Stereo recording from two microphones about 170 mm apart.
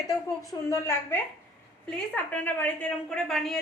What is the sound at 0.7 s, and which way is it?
A woman's voice, 15° left (ahead or behind).